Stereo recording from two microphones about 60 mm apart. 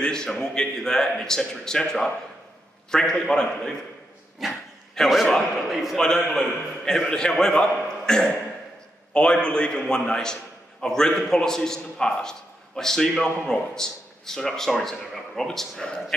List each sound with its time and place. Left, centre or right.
0.0 s a man's voice: centre
4.4 s a man's voice: centre